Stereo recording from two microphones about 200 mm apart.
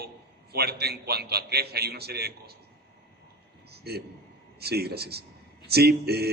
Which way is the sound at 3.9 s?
50° right (ahead or behind).